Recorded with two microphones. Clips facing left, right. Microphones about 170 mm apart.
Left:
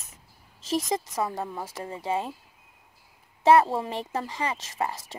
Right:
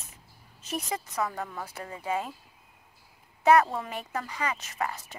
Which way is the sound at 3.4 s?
30° left (ahead or behind).